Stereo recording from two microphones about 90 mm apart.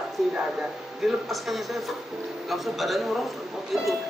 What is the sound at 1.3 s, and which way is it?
A woman's voice, centre (ahead or behind).